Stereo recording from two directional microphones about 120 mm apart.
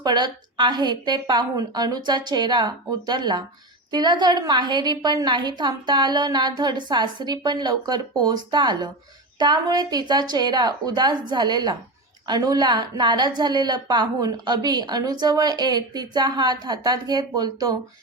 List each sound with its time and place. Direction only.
0.0 s a woman's voice: 35° right (ahead or behind)